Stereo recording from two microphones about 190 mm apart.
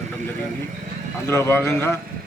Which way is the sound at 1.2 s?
15° left (ahead or behind).